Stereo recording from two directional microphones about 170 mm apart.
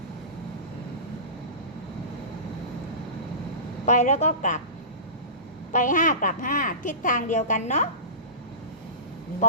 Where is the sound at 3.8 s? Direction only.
45° left (ahead or behind).